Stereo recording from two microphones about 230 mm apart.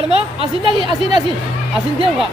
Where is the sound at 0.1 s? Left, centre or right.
Right.